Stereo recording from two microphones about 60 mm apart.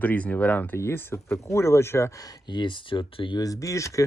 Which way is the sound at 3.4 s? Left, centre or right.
Left.